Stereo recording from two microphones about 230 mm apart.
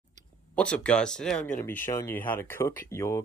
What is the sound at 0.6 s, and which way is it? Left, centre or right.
Speech, centre.